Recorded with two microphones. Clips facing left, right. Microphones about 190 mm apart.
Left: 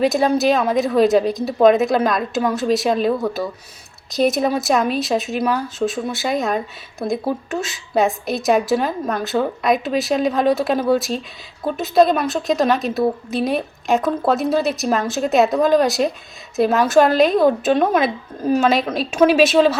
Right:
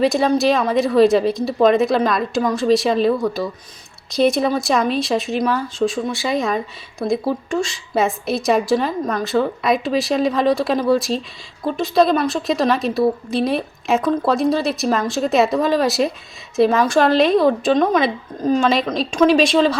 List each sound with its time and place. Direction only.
0.0 s a woman's voice: centre (ahead or behind)